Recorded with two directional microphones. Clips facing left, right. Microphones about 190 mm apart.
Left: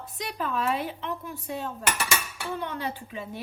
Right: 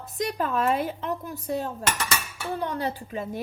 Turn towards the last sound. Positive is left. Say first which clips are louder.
# right 4 dB
turn(degrees=-40)  # may be behind; listen again after turning